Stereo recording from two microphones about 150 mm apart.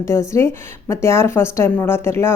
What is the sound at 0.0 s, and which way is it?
A woman's voice, 20° left (ahead or behind).